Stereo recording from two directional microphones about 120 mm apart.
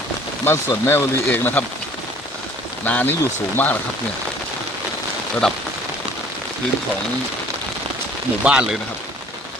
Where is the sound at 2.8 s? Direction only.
15° left (ahead or behind).